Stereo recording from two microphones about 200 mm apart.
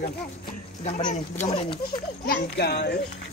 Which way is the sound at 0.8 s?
35° left (ahead or behind).